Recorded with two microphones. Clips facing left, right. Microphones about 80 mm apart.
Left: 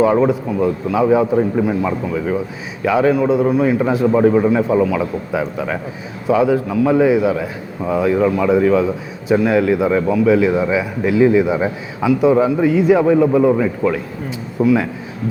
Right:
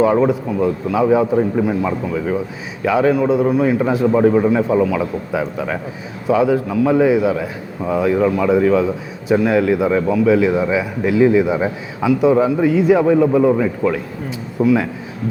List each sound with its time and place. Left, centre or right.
0.0 s a man's voice: left